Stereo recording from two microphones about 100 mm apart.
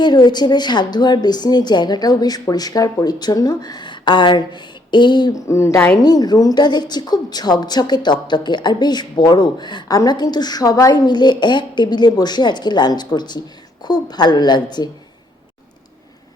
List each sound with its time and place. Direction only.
0.0 s speech: 45° left (ahead or behind)
5.3 s speech: 30° left (ahead or behind)
6.0 s speech: 40° left (ahead or behind)